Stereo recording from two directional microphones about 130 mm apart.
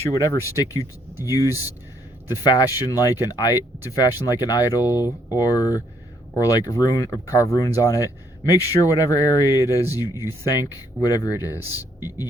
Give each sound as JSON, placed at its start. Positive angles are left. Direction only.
{"t": 0.0, "sound": "speech", "side_deg": 25}